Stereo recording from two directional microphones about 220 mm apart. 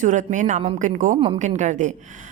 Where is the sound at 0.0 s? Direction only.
35° right (ahead or behind).